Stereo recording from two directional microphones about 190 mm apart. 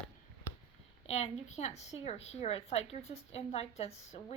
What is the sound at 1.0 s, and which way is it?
Speech, 35° left (ahead or behind).